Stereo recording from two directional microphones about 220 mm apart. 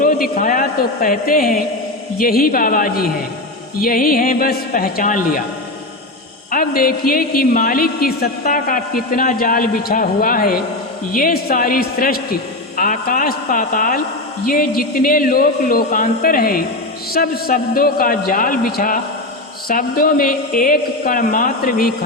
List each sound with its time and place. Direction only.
0.0 s a woman's voice: 40° left (ahead or behind)
6.5 s a woman's voice: 40° left (ahead or behind)